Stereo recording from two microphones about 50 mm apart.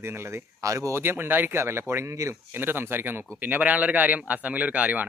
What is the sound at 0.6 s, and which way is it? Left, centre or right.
Speech, right.